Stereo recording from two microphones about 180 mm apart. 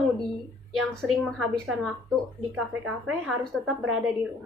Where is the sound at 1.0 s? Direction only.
Centre (ahead or behind).